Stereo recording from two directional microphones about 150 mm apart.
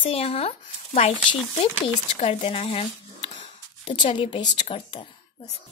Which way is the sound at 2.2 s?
45° left (ahead or behind).